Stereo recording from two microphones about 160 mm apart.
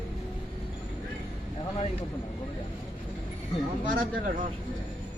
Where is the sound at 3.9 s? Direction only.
55° right (ahead or behind).